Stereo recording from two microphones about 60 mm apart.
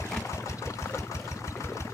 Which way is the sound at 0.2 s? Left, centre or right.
Left.